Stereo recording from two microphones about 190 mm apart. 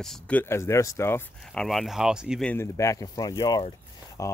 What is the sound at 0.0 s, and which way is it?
Speech, 5° left (ahead or behind).